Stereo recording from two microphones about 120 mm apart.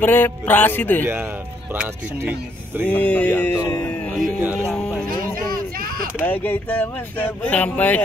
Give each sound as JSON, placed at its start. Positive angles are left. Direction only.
{"t": 0.0, "sound": "music", "side_deg": 15}
{"t": 1.0, "sound": "speech", "side_deg": -20}
{"t": 2.9, "sound": "music", "side_deg": 15}
{"t": 4.4, "sound": "speech", "side_deg": -20}
{"t": 4.6, "sound": "music", "side_deg": 5}
{"t": 6.2, "sound": "music", "side_deg": 15}